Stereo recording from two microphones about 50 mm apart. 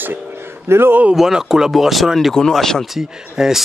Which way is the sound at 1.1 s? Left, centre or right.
Centre.